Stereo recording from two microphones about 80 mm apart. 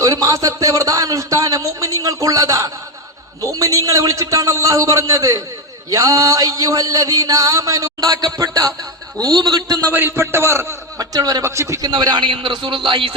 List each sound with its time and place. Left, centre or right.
0.0 s a man's voice: right
8.1 s a man's voice: right
9.2 s a man's voice: right
9.9 s a man's voice: right
10.9 s a man's voice: right
11.4 s a man's voice: right
11.8 s a man's voice: right